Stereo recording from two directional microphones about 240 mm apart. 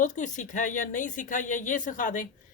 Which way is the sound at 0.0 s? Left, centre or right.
Left.